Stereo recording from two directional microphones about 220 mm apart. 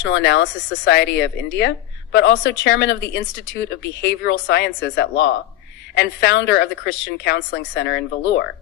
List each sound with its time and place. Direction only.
0.0 s a woman's voice: 55° left (ahead or behind)